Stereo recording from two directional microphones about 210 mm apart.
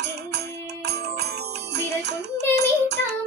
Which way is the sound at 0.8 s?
50° right (ahead or behind).